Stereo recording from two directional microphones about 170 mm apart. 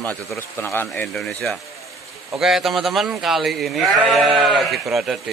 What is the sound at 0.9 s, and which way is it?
Speech, centre (ahead or behind).